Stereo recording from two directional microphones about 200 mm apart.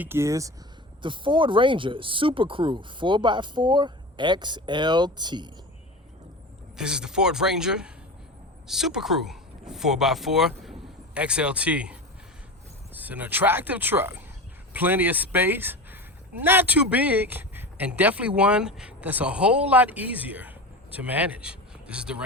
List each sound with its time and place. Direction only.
0.0 s speech: 10° right (ahead or behind)
6.7 s speech: 5° right (ahead or behind)
10.6 s a sound: centre (ahead or behind)
12.9 s a man's voice: 10° right (ahead or behind)